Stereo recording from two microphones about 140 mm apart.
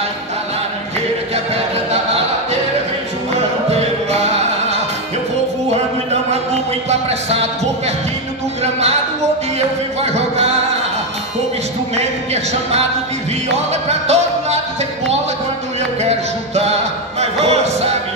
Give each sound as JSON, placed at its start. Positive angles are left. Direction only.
{"t": 3.3, "sound": "music", "side_deg": -50}
{"t": 10.1, "sound": "music", "side_deg": -50}
{"t": 13.8, "sound": "music", "side_deg": -50}
{"t": 16.0, "sound": "music", "side_deg": -50}